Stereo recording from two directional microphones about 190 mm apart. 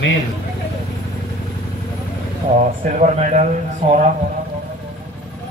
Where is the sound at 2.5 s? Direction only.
40° right (ahead or behind).